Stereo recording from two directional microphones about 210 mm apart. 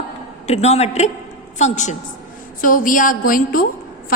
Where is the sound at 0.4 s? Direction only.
30° left (ahead or behind).